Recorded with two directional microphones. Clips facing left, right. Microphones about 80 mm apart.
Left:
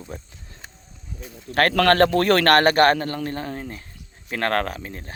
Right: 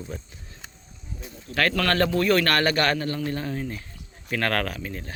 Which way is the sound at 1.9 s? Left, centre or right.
Left.